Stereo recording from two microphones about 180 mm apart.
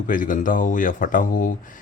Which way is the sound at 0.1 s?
50° left (ahead or behind).